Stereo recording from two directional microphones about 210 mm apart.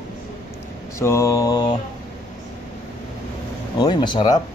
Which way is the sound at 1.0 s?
15° left (ahead or behind).